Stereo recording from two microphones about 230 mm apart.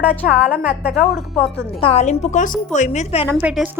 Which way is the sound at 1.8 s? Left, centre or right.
Left.